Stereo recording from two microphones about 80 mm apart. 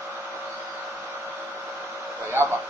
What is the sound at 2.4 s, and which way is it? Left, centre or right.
Speech, right.